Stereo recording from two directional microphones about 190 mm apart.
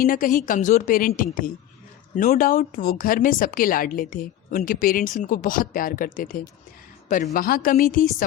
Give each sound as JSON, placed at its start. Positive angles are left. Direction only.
{"t": 0.0, "sound": "speech", "side_deg": 45}